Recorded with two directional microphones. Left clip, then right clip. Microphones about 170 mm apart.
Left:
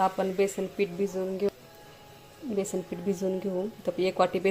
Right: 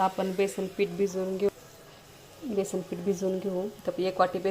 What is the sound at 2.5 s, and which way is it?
Speech, centre (ahead or behind).